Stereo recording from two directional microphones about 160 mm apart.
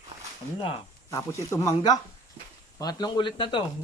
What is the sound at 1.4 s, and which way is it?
Speech, 20° left (ahead or behind).